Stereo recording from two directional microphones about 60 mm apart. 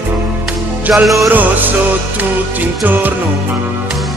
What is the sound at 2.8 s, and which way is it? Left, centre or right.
Music, right.